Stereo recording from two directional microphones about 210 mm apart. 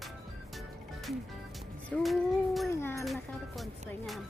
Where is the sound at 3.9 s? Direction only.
Centre (ahead or behind).